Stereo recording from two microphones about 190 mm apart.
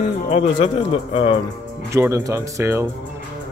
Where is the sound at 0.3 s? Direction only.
35° left (ahead or behind).